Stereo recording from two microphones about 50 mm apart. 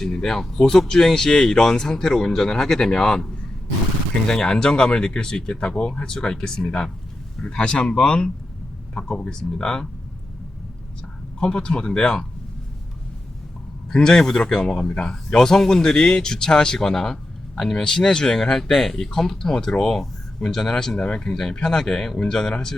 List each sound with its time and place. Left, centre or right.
0.0 s speech: centre
4.3 s speech: centre
7.4 s speech: left
11.3 s speech: centre
13.9 s speech: centre